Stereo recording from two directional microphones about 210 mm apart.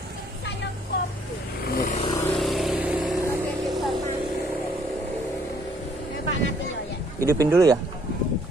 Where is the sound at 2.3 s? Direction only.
Centre (ahead or behind).